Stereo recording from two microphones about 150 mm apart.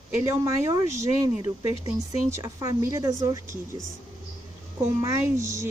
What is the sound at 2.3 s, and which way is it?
Speech, 15° right (ahead or behind).